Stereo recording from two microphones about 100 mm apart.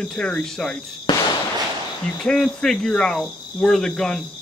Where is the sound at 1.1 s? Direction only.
45° left (ahead or behind).